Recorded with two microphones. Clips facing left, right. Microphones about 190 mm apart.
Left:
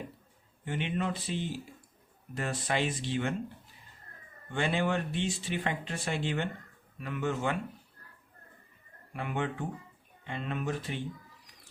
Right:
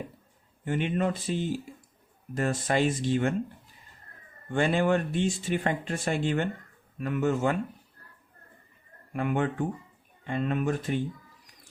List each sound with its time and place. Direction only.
0.6 s speech: 45° right (ahead or behind)
4.5 s speech: 50° right (ahead or behind)
9.1 s speech: 50° right (ahead or behind)